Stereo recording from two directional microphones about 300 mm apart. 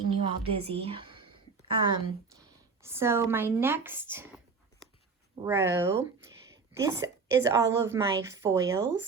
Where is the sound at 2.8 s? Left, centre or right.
Centre.